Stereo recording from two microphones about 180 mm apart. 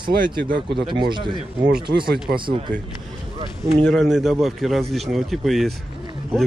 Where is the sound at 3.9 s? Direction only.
Centre (ahead or behind).